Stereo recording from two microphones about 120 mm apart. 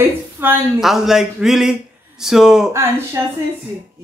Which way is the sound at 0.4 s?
20° right (ahead or behind).